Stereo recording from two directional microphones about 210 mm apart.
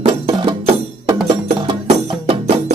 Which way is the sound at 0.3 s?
20° right (ahead or behind).